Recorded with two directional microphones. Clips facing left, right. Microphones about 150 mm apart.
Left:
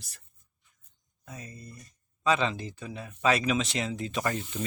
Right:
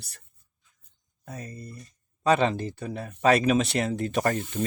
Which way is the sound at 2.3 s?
55° right (ahead or behind).